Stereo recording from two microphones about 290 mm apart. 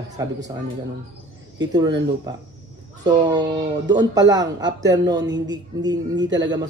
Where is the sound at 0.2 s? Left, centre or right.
Centre.